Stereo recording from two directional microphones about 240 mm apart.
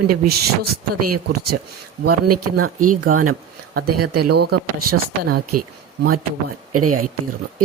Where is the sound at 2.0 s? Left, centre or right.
Right.